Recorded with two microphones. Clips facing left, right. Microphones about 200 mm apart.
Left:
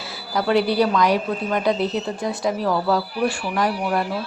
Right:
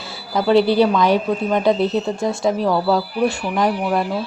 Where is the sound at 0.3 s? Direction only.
25° right (ahead or behind).